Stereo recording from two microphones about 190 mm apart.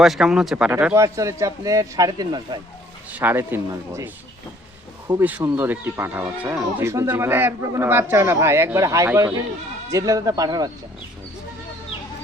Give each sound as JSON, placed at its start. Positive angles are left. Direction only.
{"t": 0.0, "sound": "speech", "side_deg": 0}
{"t": 3.1, "sound": "speech", "side_deg": -10}